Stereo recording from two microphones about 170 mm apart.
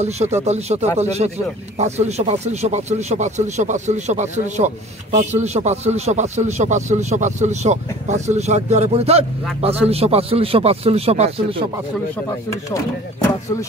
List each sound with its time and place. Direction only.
0.0 s a man's voice: 40° right (ahead or behind)